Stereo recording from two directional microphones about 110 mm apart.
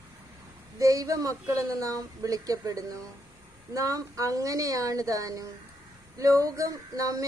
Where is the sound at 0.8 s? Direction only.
30° right (ahead or behind).